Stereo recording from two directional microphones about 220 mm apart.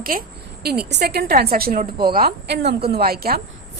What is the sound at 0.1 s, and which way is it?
A woman's voice, 40° right (ahead or behind).